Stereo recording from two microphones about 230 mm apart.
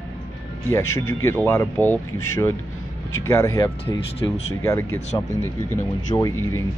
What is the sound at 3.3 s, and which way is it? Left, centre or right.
A man's voice, centre.